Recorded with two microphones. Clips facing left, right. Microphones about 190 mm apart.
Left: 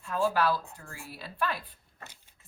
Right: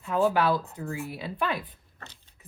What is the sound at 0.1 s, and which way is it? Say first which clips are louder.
Speech: right 4 dB; 20° right (ahead or behind).